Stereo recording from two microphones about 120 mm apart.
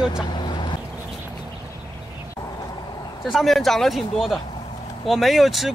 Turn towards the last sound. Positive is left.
turn(degrees=0)  # may be behind; listen again after turning